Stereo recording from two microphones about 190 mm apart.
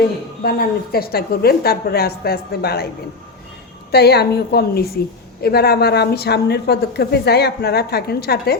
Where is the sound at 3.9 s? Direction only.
60° left (ahead or behind).